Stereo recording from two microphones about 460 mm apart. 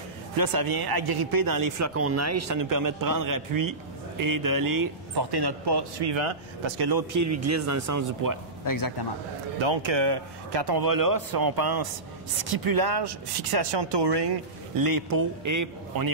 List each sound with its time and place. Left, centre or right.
0.4 s speech: right
2.0 s a man's voice: right
6.9 s speech: right
7.2 s a man's voice: right
8.6 s a man's voice: left
9.6 s speech: right